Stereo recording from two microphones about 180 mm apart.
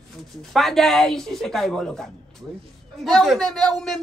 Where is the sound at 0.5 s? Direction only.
Centre (ahead or behind).